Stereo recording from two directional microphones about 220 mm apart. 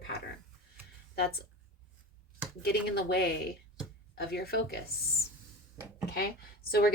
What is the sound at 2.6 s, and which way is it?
Speech, 45° left (ahead or behind).